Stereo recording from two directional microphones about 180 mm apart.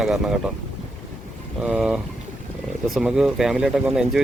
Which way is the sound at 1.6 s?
5° right (ahead or behind).